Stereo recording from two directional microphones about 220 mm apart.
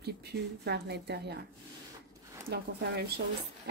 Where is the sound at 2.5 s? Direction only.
45° right (ahead or behind).